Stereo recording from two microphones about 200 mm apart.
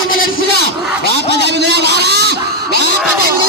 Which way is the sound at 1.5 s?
60° right (ahead or behind).